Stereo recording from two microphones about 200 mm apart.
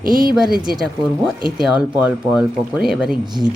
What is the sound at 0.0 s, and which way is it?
Speech, 45° right (ahead or behind).